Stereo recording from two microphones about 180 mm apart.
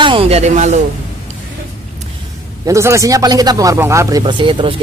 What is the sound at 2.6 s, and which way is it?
Speech, 15° right (ahead or behind).